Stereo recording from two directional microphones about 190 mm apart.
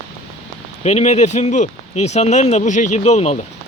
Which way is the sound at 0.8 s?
35° left (ahead or behind).